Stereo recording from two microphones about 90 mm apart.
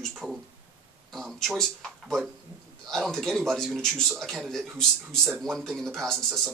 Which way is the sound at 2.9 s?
5° left (ahead or behind).